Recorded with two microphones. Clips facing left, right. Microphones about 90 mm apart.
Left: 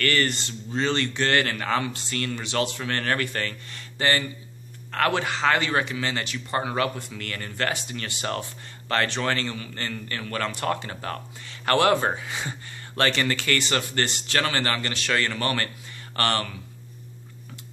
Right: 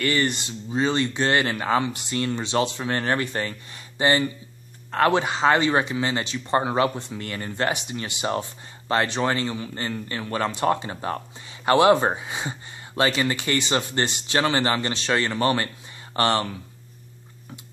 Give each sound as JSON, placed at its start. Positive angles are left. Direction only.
{"t": 0.0, "sound": "speech", "side_deg": -20}